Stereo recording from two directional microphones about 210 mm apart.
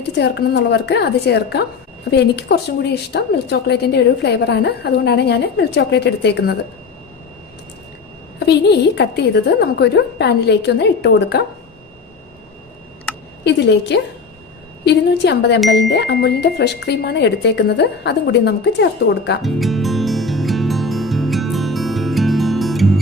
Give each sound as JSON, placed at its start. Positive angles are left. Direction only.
{"t": 0.2, "sound": "a woman's voice", "side_deg": 50}
{"t": 9.0, "sound": "a woman's voice", "side_deg": 50}
{"t": 13.4, "sound": "a woman's voice", "side_deg": 55}
{"t": 19.4, "sound": "music", "side_deg": 0}